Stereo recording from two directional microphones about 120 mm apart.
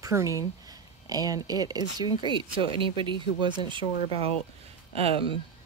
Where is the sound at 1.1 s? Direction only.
30° right (ahead or behind).